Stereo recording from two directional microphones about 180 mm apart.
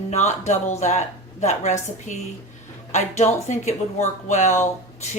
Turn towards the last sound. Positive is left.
turn(degrees=40)  # may be behind; listen again after turning